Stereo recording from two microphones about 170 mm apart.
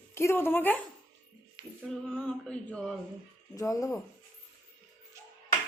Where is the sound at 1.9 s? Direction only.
5° left (ahead or behind).